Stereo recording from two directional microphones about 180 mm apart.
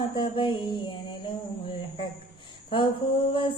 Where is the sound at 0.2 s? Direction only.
25° left (ahead or behind).